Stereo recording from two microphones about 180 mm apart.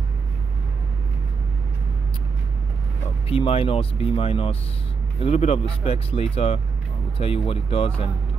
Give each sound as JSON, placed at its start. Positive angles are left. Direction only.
{"t": 3.3, "sound": "speech", "side_deg": 30}